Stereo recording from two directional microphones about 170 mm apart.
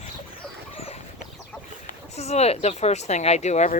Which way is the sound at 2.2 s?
40° left (ahead or behind).